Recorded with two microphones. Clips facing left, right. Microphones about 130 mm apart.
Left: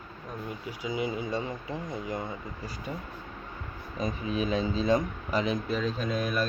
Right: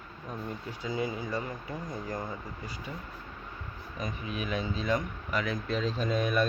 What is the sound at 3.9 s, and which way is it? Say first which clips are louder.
Speech: left 6 dB; 30° left (ahead or behind).